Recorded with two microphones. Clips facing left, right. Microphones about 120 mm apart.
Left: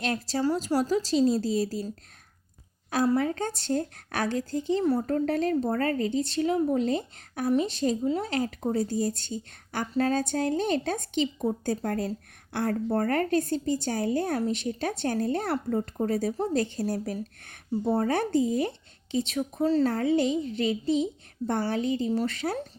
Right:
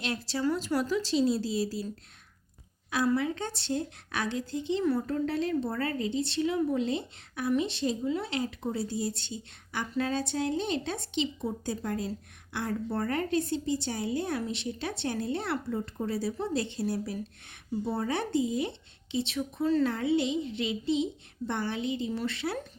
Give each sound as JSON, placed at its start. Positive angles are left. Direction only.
{"t": 0.0, "sound": "a woman's voice", "side_deg": 45}
{"t": 2.9, "sound": "a woman's voice", "side_deg": 45}